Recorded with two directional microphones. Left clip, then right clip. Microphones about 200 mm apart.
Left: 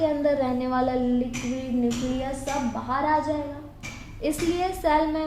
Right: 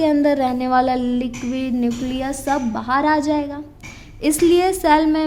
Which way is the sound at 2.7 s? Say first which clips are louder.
Right 5 dB; 45° right (ahead or behind).